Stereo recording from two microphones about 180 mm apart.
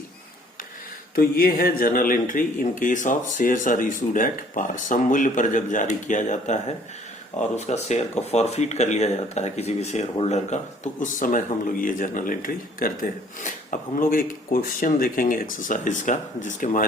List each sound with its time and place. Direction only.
1.1 s speech: 55° left (ahead or behind)